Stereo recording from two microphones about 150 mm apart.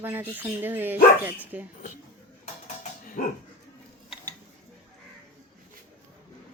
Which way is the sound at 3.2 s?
70° left (ahead or behind).